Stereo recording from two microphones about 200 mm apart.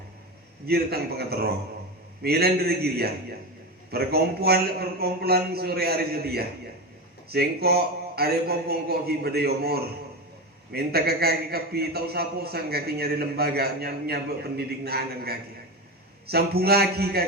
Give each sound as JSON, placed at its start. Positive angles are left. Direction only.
{"t": 0.6, "sound": "a man's voice", "side_deg": -50}